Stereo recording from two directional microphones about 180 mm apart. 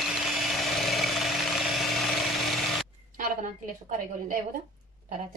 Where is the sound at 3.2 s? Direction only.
50° right (ahead or behind).